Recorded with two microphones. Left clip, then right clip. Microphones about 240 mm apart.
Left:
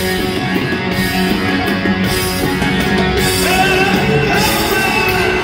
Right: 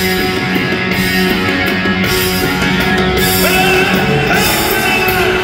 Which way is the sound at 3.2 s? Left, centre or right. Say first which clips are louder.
Right 1 dB; centre.